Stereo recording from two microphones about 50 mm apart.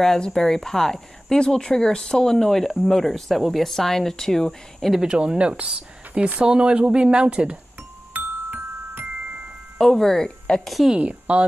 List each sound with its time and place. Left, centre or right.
0.3 s speech: centre
4.9 s speech: centre
8.1 s glockenspiel: right
9.8 s speech: centre
10.7 s a woman's voice: centre
11.0 s speech: right